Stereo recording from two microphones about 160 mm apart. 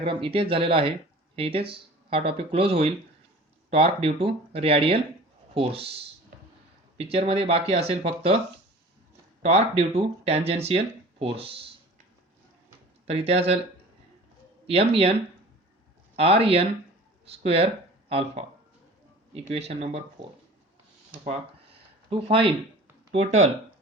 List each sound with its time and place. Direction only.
0.0 s speech: 35° right (ahead or behind)
6.3 s a sound: 70° right (ahead or behind)
6.9 s speech: 40° right (ahead or behind)
9.4 s speech: 40° right (ahead or behind)
13.1 s speech: 40° right (ahead or behind)
14.7 s speech: 40° right (ahead or behind)
16.1 s speech: 35° right (ahead or behind)
22.1 s speech: 35° right (ahead or behind)